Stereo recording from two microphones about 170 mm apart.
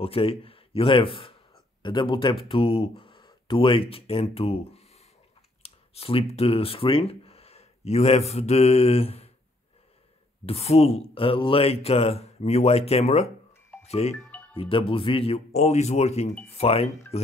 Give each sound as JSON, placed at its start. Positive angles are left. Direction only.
{"t": 0.0, "sound": "speech", "side_deg": 35}
{"t": 10.4, "sound": "speech", "side_deg": 35}